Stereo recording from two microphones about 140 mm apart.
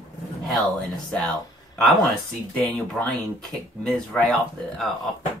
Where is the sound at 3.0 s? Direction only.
10° left (ahead or behind).